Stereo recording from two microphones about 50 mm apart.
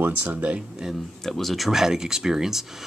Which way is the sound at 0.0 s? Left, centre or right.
Right.